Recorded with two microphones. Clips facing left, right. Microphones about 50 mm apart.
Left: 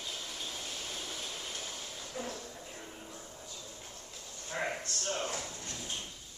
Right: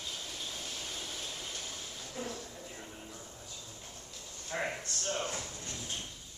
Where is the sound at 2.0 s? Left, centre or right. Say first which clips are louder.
Even; centre.